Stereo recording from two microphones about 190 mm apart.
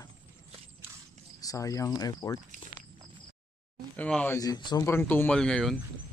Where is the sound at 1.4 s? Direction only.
15° left (ahead or behind).